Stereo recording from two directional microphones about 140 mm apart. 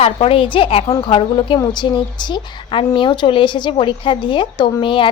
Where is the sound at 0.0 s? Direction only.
45° left (ahead or behind).